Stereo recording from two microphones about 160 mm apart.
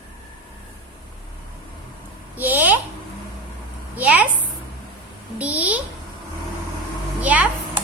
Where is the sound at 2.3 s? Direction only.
10° right (ahead or behind).